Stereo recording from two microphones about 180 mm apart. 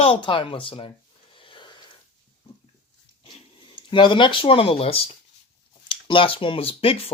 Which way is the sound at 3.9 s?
25° left (ahead or behind).